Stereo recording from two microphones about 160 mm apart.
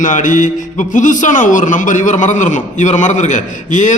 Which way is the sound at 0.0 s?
55° left (ahead or behind).